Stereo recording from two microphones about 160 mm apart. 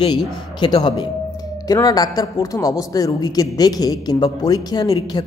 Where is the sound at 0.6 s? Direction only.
25° left (ahead or behind).